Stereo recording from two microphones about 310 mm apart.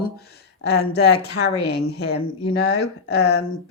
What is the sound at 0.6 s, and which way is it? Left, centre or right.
Speech, left.